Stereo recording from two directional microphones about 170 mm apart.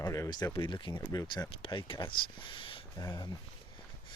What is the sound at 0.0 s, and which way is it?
Speech, 20° left (ahead or behind).